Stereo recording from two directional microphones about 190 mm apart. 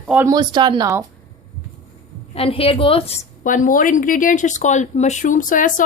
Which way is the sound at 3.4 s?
45° left (ahead or behind).